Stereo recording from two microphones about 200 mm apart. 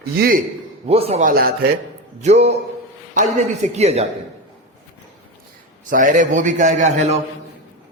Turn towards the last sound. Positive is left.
turn(degrees=-35)  # may be behind; listen again after turning